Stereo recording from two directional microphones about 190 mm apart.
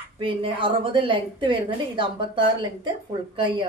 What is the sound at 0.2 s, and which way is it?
A woman's voice, 25° right (ahead or behind).